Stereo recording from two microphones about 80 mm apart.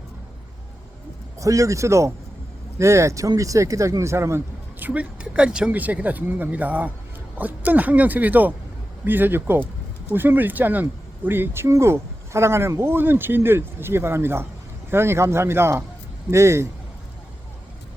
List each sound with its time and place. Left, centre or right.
1.4 s speech: right
4.8 s speech: centre; by 16.6 s right